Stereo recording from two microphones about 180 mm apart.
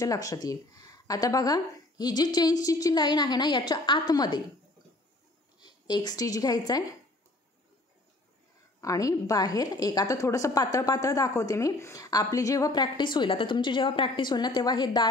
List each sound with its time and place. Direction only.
0.0 s a woman's voice: 20° left (ahead or behind)
5.6 s a woman's voice: 25° left (ahead or behind)
8.8 s a woman's voice: 20° left (ahead or behind)